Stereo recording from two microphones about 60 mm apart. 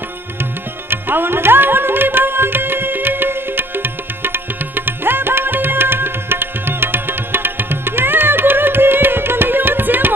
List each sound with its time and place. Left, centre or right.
0.8 s music: right